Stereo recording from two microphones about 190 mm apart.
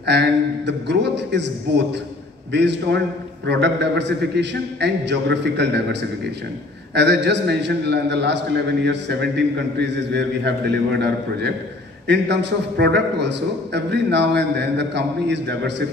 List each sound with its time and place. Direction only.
0.0 s a man's voice: 65° right (ahead or behind)